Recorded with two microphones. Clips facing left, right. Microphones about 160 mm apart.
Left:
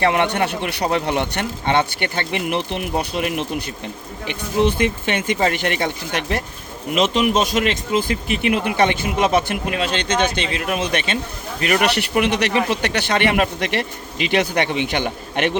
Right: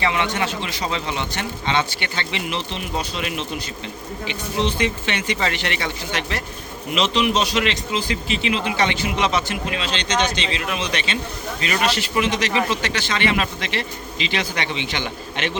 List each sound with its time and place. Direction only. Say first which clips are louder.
0.0 s a man's voice: left 4 dB; 55° left (ahead or behind)